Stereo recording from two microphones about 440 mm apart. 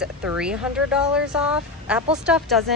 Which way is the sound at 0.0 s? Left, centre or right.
Centre.